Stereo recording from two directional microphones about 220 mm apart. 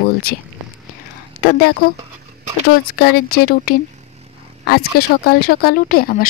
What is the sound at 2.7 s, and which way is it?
Speech, 45° left (ahead or behind).